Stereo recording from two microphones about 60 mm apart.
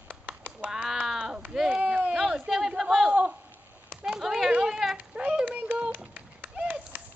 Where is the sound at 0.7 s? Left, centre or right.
Centre.